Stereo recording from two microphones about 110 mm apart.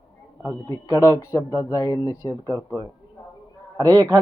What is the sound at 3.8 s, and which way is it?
Speech, 35° right (ahead or behind).